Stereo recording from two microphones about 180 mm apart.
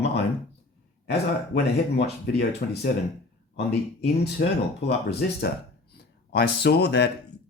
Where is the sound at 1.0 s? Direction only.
65° left (ahead or behind).